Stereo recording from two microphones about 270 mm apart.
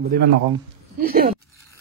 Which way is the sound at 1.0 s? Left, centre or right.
Right.